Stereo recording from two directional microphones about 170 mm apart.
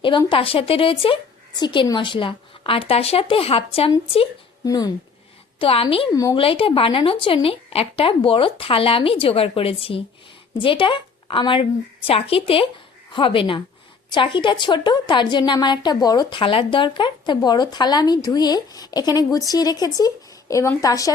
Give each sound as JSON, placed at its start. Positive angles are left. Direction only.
{"t": 0.0, "sound": "a woman's voice", "side_deg": 30}
{"t": 4.6, "sound": "a woman's voice", "side_deg": 20}
{"t": 5.5, "sound": "a woman's voice", "side_deg": 35}